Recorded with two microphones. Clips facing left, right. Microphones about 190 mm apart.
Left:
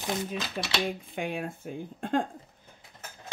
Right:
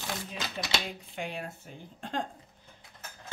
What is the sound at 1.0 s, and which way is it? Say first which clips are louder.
Speech: left 5 dB; 55° left (ahead or behind).